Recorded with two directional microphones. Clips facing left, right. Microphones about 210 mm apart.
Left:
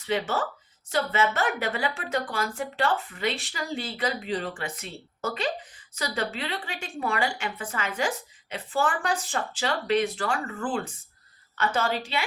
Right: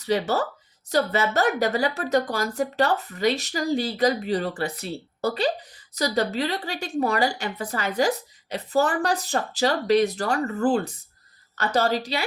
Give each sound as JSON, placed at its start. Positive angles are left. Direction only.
{"t": 0.0, "sound": "a woman's voice", "side_deg": -40}